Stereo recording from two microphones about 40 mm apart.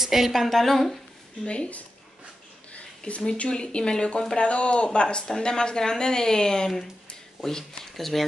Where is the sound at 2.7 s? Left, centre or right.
Left.